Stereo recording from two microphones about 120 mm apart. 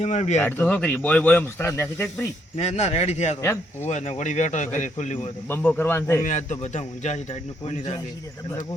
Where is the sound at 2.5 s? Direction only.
60° left (ahead or behind).